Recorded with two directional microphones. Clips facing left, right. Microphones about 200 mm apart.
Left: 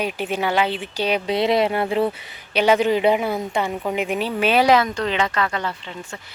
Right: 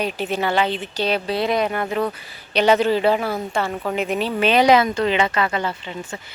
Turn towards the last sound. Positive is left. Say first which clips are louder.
# right 3 dB
turn(degrees=-5)  # may be behind; listen again after turning